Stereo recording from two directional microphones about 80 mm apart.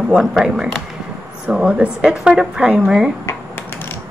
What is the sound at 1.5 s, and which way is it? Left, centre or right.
A woman's voice, centre.